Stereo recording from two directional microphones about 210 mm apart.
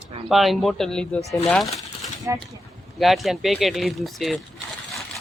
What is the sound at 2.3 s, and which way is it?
Speech, 10° right (ahead or behind).